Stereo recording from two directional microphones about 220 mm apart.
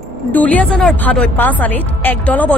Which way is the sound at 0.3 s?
5° left (ahead or behind).